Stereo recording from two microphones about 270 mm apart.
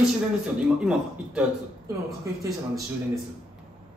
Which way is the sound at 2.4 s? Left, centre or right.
Centre.